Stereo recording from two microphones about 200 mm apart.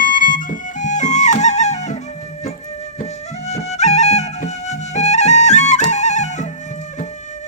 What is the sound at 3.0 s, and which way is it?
Music, 35° left (ahead or behind).